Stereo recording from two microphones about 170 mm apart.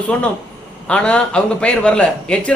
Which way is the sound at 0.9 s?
5° left (ahead or behind).